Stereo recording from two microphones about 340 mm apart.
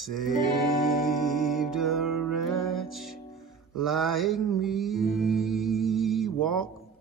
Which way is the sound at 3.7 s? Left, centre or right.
Centre.